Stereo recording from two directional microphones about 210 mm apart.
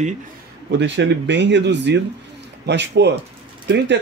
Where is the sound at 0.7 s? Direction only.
55° right (ahead or behind).